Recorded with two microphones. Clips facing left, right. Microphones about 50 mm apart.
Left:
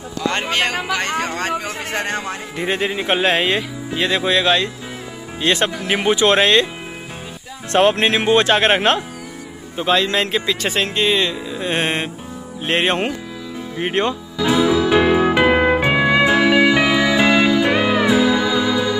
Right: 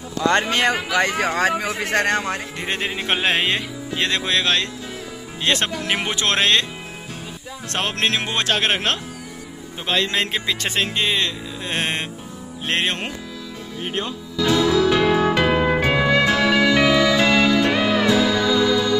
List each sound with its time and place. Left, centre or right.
0.7 s speech: centre
2.0 s a man's voice: right
2.5 s speech: centre
7.7 s speech: centre
9.8 s speech: centre
11.6 s speech: centre
12.6 s music: centre
13.7 s speech: left
14.4 s music: centre